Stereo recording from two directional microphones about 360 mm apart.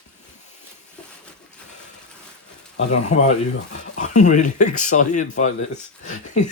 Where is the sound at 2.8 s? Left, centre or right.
Centre.